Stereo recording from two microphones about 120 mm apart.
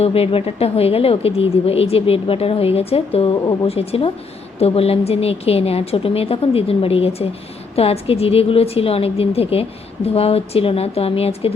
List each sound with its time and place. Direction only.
0.0 s a woman's voice: 55° left (ahead or behind)